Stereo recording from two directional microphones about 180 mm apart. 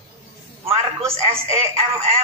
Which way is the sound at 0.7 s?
35° right (ahead or behind).